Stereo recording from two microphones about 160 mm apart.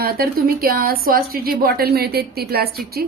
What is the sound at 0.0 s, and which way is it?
A woman's voice, 70° right (ahead or behind).